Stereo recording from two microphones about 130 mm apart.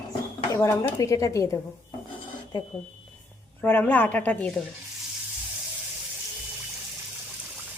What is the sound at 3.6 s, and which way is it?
Speech, 15° left (ahead or behind).